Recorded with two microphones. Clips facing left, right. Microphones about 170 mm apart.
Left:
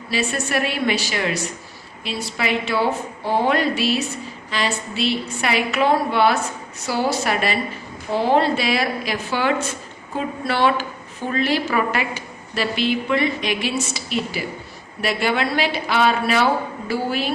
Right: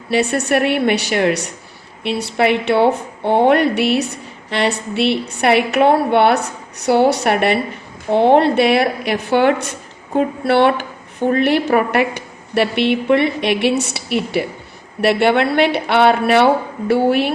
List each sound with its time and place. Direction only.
0.1 s a woman's voice: 65° right (ahead or behind)